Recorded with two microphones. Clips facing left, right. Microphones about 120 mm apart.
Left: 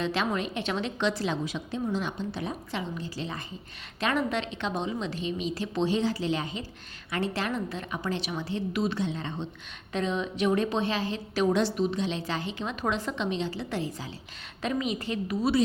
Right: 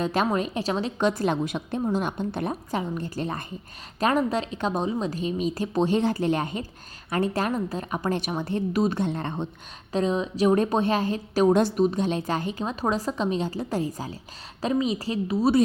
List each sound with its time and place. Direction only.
0.0 s a woman's voice: 45° right (ahead or behind)
4.0 s a woman's voice: 40° right (ahead or behind); by 9.5 s 55° right (ahead or behind)
9.9 s a woman's voice: 35° right (ahead or behind)
14.6 s a woman's voice: 30° right (ahead or behind)